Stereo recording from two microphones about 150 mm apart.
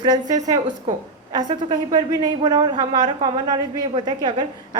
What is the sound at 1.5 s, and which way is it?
A woman's voice, 30° right (ahead or behind).